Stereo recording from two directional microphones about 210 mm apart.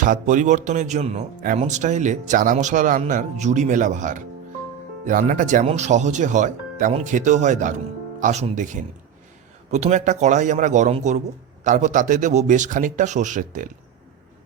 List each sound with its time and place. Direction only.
0.0 s speech: 40° right (ahead or behind)